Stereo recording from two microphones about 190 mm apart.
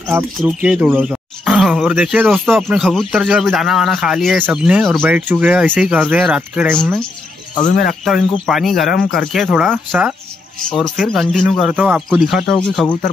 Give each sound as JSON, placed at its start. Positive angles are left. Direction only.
{"t": 0.4, "sound": "speech", "side_deg": -5}
{"t": 6.7, "sound": "speech", "side_deg": 5}
{"t": 7.6, "sound": "speech", "side_deg": 50}
{"t": 8.0, "sound": "speech", "side_deg": 0}